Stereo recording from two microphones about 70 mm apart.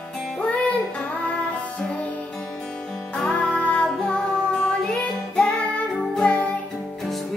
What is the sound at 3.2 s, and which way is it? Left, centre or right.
Music, centre.